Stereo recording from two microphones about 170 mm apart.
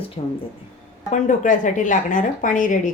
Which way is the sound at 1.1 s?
50° left (ahead or behind).